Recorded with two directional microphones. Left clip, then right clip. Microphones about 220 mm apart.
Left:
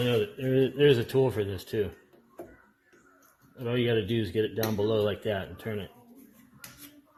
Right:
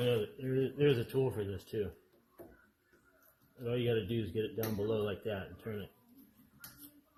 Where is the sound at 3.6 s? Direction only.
35° left (ahead or behind).